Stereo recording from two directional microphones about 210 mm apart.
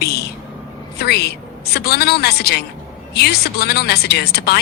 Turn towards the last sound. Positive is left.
turn(degrees=50)  # may be behind; listen again after turning